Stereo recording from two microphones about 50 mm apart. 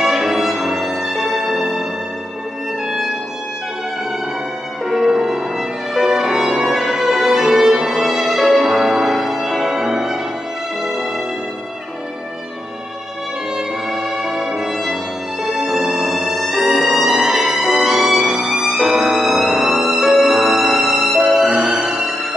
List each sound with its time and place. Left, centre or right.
0.0 s music: centre
2.9 s music: centre
4.8 s violin: centre
9.7 s music: centre
13.6 s violin: centre
15.4 s music: centre
17.6 s violin: centre
18.5 s music: centre
21.5 s music: centre